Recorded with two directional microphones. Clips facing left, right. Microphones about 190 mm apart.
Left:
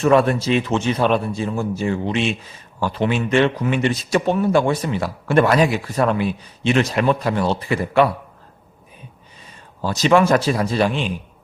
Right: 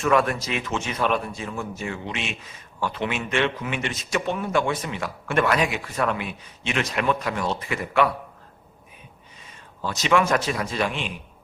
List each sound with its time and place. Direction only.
0.0 s a man's voice: 30° left (ahead or behind)
9.8 s a man's voice: 35° left (ahead or behind)